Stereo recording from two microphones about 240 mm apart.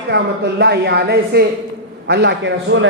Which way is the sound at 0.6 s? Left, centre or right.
Right.